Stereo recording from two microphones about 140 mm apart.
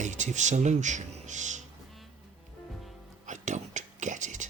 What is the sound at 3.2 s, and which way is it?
Whispering, 60° right (ahead or behind).